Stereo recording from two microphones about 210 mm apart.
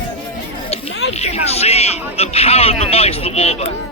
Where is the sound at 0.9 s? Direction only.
55° left (ahead or behind).